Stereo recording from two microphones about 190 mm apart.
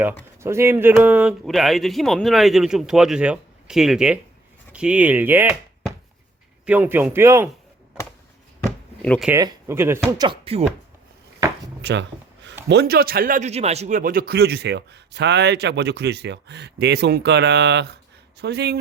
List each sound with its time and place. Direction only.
0.3 s speech: 15° right (ahead or behind)
6.7 s speech: 10° right (ahead or behind)
8.6 s a sound: 5° left (ahead or behind)
9.3 s speech: 15° right (ahead or behind)
10.1 s speech: 25° right (ahead or behind)
11.8 s a man's voice: 65° right (ahead or behind)